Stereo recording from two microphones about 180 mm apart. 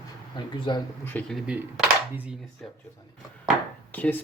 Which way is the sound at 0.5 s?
25° left (ahead or behind).